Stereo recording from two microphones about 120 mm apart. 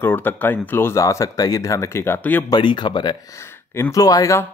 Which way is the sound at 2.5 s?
40° left (ahead or behind).